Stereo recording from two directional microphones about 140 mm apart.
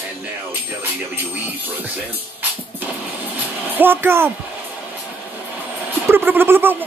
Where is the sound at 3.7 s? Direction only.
15° right (ahead or behind).